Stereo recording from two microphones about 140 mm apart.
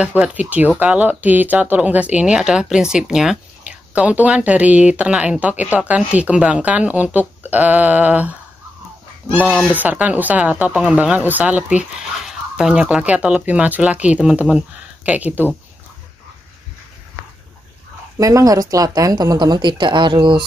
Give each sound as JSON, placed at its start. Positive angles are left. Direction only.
{"t": 0.0, "sound": "speech", "side_deg": -10}
{"t": 9.5, "sound": "speech", "side_deg": 10}
{"t": 9.8, "sound": "speech", "side_deg": -10}
{"t": 18.1, "sound": "speech", "side_deg": -25}